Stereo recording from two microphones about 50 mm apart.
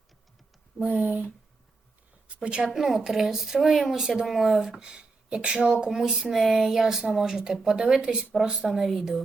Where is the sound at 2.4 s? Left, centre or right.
Centre.